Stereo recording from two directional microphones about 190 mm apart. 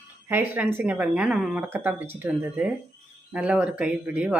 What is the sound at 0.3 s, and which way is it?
Speech, 10° right (ahead or behind).